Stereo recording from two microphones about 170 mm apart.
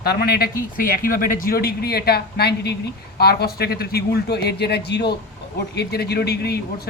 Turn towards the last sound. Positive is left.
turn(degrees=70)  # may be behind; listen again after turning